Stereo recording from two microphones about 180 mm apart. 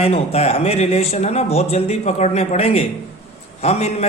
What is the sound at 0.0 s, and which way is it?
A man's voice, 35° left (ahead or behind).